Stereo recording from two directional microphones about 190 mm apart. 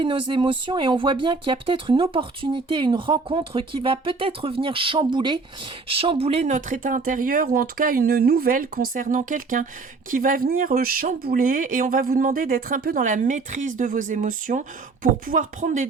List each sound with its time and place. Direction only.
0.0 s speech: 25° right (ahead or behind)